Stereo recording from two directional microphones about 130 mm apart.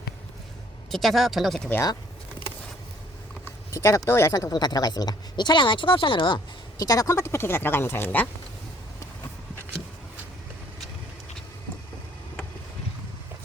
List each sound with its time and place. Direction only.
0.9 s speech: centre (ahead or behind)
3.4 s speech: 25° left (ahead or behind)